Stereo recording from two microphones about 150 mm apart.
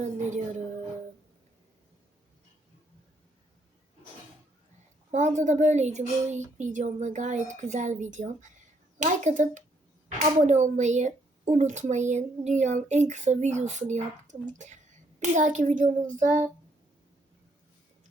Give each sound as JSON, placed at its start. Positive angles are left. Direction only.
{"t": 0.0, "sound": "speech", "side_deg": -55}
{"t": 5.4, "sound": "a child's voice", "side_deg": -50}